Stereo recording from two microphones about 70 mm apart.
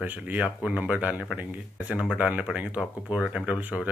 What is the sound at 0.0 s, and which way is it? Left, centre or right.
Speech, right.